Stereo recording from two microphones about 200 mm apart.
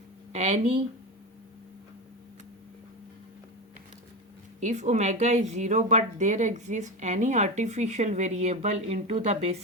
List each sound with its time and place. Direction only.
0.3 s a woman's voice: 35° right (ahead or behind)
4.6 s a woman's voice: 35° right (ahead or behind)